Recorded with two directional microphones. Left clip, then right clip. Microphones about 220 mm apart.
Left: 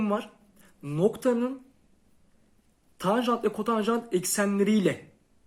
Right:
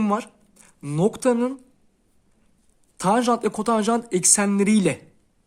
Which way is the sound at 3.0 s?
45° right (ahead or behind).